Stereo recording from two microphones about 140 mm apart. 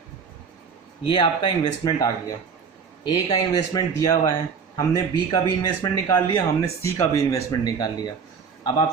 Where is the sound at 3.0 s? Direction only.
25° left (ahead or behind).